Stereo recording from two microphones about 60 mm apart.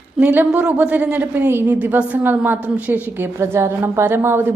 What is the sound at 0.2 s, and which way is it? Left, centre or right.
A woman's voice, right.